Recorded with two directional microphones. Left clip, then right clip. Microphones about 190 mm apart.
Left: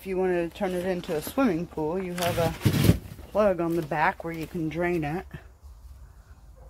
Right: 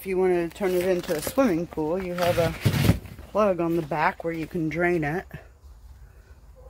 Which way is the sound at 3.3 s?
10° right (ahead or behind).